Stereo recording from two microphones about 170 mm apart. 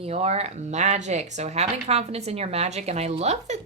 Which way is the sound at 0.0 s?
40° right (ahead or behind).